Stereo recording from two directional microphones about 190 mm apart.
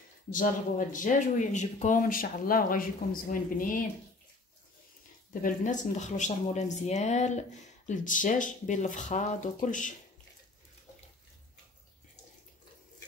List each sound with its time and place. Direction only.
0.3 s speech: 45° left (ahead or behind)
5.3 s speech: 45° left (ahead or behind)